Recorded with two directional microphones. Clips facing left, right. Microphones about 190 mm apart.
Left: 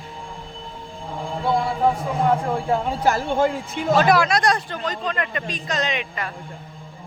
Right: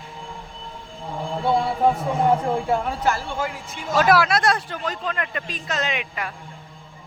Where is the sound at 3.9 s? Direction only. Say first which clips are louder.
Right 1 dB; 5° right (ahead or behind).